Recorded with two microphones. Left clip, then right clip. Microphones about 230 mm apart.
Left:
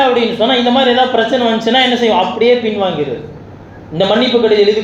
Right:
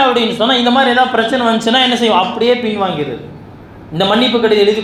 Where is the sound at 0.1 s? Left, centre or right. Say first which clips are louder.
Left 1 dB; right.